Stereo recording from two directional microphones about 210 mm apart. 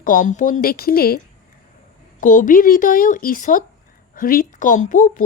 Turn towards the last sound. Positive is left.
turn(degrees=40)  # may be behind; listen again after turning